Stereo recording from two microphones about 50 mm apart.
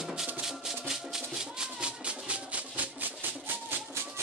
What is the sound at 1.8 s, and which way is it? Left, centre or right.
Music, right.